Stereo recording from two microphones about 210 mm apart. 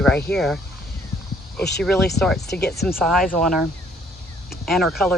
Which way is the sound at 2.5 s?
50° left (ahead or behind).